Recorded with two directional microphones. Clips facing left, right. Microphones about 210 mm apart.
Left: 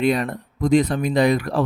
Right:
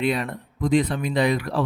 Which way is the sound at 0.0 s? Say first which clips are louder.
Left 4 dB; 45° left (ahead or behind).